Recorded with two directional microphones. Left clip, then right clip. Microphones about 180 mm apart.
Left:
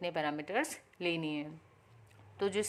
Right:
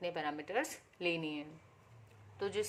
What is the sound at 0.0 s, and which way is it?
A woman's voice, 30° left (ahead or behind).